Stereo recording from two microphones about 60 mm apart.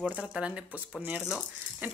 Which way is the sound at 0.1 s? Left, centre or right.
Centre.